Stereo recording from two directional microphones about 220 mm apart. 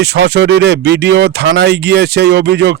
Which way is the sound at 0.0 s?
50° right (ahead or behind).